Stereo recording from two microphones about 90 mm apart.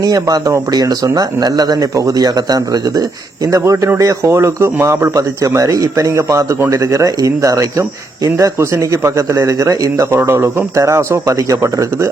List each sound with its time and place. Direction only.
0.0 s speech: 45° right (ahead or behind)